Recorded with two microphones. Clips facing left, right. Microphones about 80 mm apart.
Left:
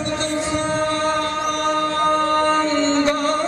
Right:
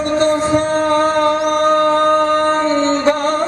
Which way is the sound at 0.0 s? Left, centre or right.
Right.